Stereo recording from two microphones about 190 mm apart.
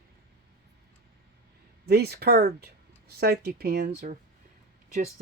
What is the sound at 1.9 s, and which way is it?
Speech, 55° right (ahead or behind).